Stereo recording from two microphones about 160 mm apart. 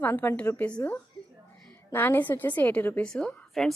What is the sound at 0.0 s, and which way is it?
A woman's voice, 10° left (ahead or behind).